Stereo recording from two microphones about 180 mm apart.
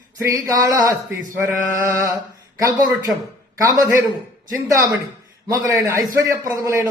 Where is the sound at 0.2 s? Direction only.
20° right (ahead or behind).